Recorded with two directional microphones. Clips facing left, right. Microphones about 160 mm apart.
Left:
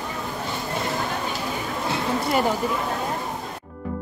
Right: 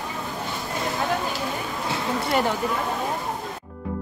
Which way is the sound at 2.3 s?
Centre (ahead or behind).